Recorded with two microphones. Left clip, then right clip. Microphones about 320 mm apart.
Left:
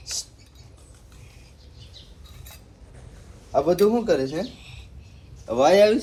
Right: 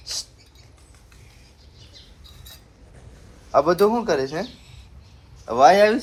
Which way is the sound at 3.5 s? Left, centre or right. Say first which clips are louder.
Right 2 dB; centre.